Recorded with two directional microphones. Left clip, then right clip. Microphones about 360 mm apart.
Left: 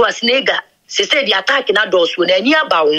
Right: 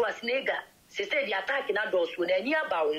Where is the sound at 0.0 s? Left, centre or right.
Left.